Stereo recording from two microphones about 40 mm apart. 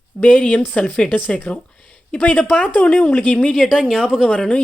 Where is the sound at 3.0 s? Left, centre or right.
Left.